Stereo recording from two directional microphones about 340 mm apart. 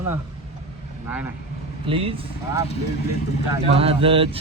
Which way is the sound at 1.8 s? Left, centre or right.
Centre.